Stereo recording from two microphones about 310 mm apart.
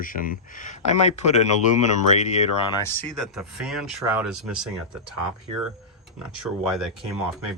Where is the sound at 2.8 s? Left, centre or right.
Centre.